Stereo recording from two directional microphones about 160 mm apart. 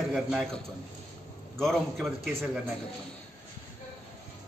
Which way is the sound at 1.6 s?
Centre (ahead or behind).